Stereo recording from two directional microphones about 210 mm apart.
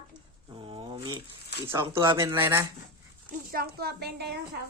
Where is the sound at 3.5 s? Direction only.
50° right (ahead or behind).